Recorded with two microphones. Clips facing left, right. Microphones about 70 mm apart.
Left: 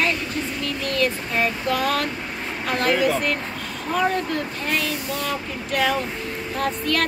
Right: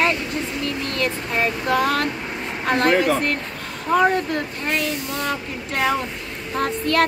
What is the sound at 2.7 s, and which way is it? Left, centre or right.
Child singing, right.